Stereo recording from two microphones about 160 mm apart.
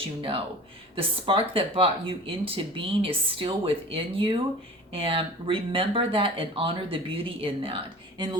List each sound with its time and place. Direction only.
0.2 s speech: 35° right (ahead or behind)